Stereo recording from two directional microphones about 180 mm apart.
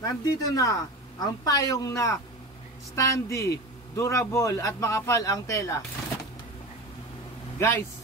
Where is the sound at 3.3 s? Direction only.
15° left (ahead or behind).